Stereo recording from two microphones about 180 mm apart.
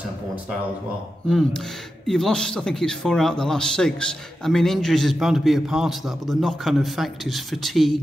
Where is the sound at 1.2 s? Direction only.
5° left (ahead or behind).